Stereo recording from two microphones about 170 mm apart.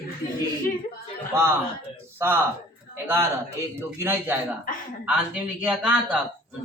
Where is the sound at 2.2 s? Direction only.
15° right (ahead or behind).